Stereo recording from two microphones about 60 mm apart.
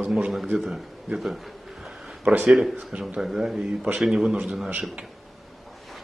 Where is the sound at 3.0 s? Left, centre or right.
Centre.